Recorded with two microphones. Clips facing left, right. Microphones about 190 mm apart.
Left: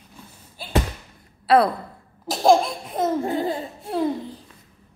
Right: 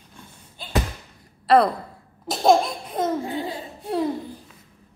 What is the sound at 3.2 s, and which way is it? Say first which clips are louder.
Speech: left 5 dB; 50° left (ahead or behind).